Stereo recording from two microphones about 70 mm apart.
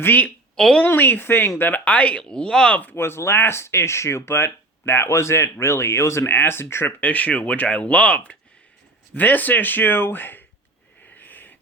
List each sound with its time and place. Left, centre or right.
0.0 s speech: left
0.5 s a woman's voice: centre
0.9 s speech: left; by 2.7 s centre
2.9 s speech: left
7.0 s speech: left
11.0 s wheeze: left